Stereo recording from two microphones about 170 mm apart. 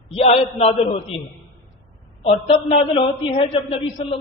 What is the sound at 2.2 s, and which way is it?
A man's voice, 35° left (ahead or behind).